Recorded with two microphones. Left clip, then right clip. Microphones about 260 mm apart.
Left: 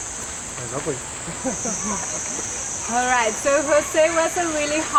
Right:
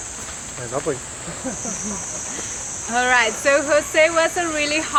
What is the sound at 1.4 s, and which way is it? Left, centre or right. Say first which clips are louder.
Speech: left 3 dB; centre.